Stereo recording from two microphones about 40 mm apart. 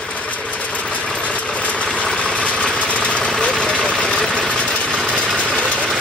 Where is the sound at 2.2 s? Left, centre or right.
Left.